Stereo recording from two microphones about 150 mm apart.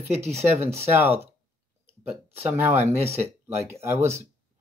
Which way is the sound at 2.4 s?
15° right (ahead or behind).